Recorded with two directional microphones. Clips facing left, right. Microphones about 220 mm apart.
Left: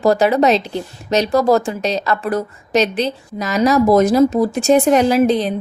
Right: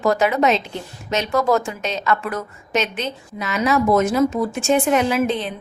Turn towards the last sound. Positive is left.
turn(degrees=40)  # may be behind; listen again after turning